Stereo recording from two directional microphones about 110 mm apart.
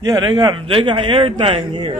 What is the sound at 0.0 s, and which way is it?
Speech, 40° right (ahead or behind).